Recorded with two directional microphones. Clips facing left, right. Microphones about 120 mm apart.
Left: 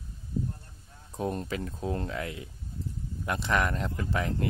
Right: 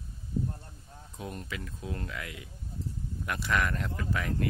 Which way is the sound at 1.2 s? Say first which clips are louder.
Left 8 dB; 35° left (ahead or behind).